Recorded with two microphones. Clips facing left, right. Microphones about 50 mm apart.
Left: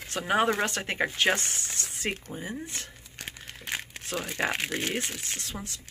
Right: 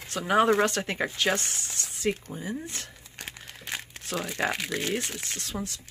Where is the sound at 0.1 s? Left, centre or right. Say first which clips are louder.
Right 3 dB; centre.